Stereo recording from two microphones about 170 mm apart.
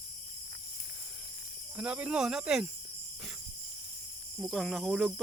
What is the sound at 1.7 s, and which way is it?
Cricket, 5° right (ahead or behind).